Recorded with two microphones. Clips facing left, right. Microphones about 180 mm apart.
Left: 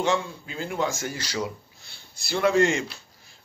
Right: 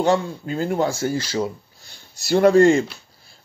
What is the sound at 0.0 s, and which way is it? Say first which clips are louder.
Speech: right 6 dB; 40° right (ahead or behind).